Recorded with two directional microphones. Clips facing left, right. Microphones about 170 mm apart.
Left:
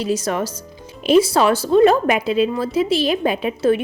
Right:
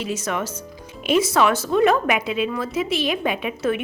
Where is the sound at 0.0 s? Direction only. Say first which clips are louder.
Left 5 dB; 35° left (ahead or behind).